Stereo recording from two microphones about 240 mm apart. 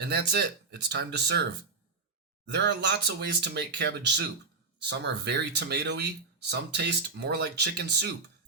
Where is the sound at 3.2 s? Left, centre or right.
Right.